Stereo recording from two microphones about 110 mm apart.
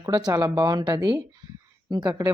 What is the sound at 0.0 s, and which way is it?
Speech, 35° right (ahead or behind).